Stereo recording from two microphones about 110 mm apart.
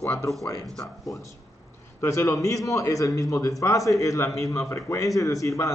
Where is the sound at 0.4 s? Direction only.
25° left (ahead or behind).